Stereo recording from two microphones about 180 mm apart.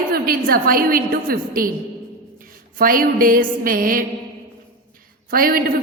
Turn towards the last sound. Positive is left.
turn(degrees=-55)  # may be behind; listen again after turning